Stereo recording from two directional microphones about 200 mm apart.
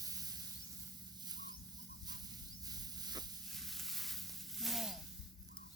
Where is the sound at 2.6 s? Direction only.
20° right (ahead or behind).